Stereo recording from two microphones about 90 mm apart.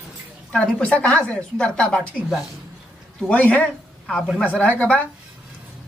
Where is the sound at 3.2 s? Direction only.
15° left (ahead or behind).